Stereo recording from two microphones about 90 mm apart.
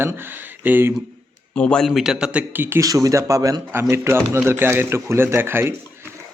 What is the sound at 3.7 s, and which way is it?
A man's voice, 25° right (ahead or behind).